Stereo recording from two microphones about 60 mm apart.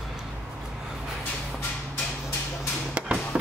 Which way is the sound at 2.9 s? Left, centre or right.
Right.